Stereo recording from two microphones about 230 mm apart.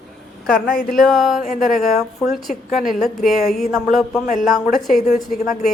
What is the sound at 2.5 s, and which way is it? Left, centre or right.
Speech, left.